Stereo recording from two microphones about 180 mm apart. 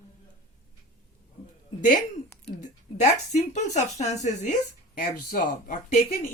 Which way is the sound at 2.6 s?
40° left (ahead or behind).